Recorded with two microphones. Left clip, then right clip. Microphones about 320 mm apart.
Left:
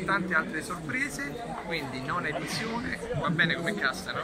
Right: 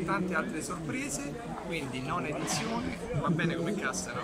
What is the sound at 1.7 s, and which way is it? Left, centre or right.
Speech, centre.